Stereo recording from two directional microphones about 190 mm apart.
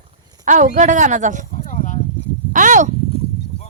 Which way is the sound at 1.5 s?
40° left (ahead or behind).